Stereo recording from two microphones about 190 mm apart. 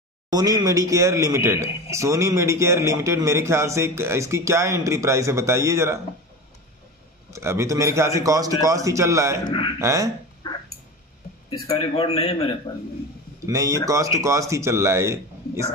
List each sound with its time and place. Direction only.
0.3 s speech: 20° right (ahead or behind)
7.3 s speech: 15° right (ahead or behind)
9.5 s speech: 25° left (ahead or behind)
9.8 s speech: 15° right (ahead or behind)
11.5 s speech: 20° left (ahead or behind)
11.9 s a man's voice: 30° left (ahead or behind)
13.5 s speech: 15° right (ahead or behind)